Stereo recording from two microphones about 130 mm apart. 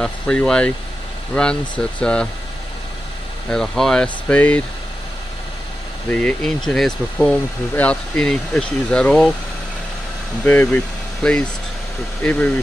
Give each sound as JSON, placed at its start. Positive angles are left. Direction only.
{"t": 0.0, "sound": "speech", "side_deg": 5}
{"t": 3.4, "sound": "speech", "side_deg": 5}
{"t": 6.0, "sound": "speech", "side_deg": 5}
{"t": 10.4, "sound": "speech", "side_deg": 10}